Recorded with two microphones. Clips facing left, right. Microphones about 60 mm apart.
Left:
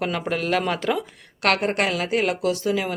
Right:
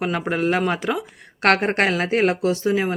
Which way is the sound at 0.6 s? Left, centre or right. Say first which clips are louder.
Right 1 dB; centre.